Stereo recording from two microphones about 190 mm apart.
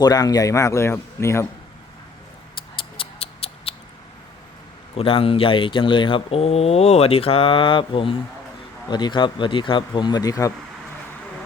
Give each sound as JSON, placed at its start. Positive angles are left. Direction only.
{"t": 0.0, "sound": "a man's voice", "side_deg": 20}
{"t": 2.7, "sound": "a sound", "side_deg": 30}
{"t": 4.9, "sound": "speech", "side_deg": 30}